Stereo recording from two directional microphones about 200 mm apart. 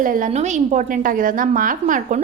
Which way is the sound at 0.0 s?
40° right (ahead or behind).